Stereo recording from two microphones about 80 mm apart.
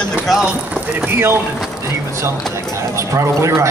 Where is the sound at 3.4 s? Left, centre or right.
Right.